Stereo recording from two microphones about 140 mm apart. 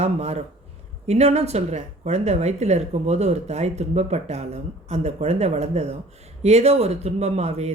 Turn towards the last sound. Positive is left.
turn(degrees=-50)  # may be behind; listen again after turning